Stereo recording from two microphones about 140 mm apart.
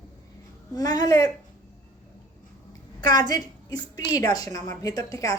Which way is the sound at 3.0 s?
30° left (ahead or behind).